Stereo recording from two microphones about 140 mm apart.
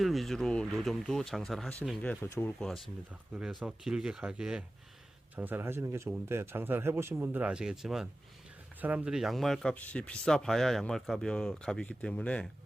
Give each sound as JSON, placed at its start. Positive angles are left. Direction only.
{"t": 0.0, "sound": "speech", "side_deg": 0}
{"t": 2.0, "sound": "speech", "side_deg": 15}
{"t": 2.6, "sound": "speech", "side_deg": 0}